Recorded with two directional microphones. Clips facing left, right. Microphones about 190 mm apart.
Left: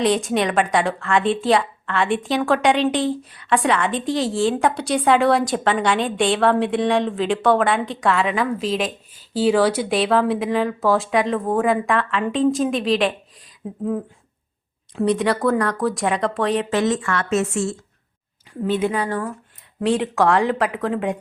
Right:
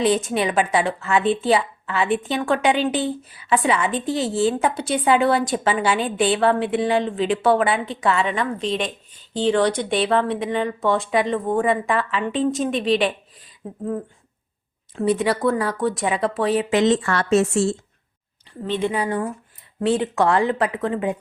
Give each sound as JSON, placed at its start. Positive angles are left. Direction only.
{"t": 0.0, "sound": "a woman's voice", "side_deg": 0}
{"t": 14.9, "sound": "a woman's voice", "side_deg": -5}
{"t": 16.6, "sound": "speech", "side_deg": -15}
{"t": 16.9, "sound": "a woman's voice", "side_deg": -35}
{"t": 18.6, "sound": "a woman's voice", "side_deg": 5}